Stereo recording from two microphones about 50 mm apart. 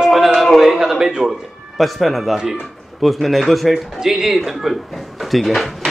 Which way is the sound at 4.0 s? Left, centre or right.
Centre.